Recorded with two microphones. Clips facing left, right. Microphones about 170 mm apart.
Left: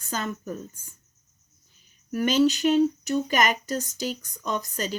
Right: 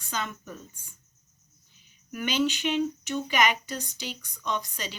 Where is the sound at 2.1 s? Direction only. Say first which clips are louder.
Left 6 dB; 40° left (ahead or behind).